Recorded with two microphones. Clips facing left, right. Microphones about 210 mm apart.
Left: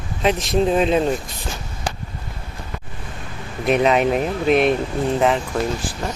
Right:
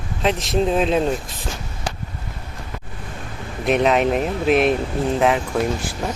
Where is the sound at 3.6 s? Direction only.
Centre (ahead or behind).